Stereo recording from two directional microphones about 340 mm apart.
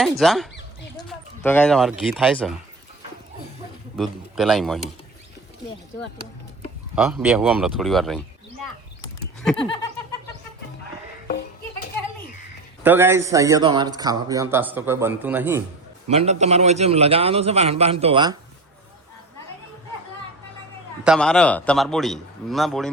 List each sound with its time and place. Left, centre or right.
0.0 s a man's voice: centre
3.9 s a man's voice: centre
6.9 s a man's voice: centre
9.6 s snicker: centre
11.3 s music: left
12.8 s speech: centre
16.0 s speech: centre
21.0 s a man's voice: centre